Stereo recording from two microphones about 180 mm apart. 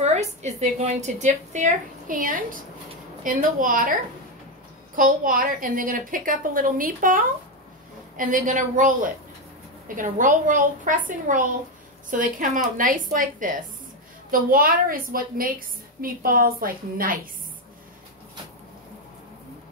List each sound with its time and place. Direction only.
0.0 s a woman's voice: 40° right (ahead or behind)
4.9 s a woman's voice: 50° right (ahead or behind)